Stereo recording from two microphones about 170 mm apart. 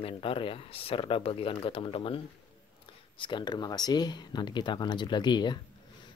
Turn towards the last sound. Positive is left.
turn(degrees=25)  # may be behind; listen again after turning